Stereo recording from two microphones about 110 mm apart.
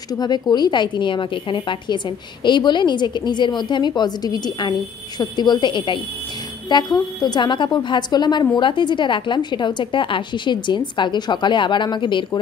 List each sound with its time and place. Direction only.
0.2 s a woman's voice: 40° left (ahead or behind)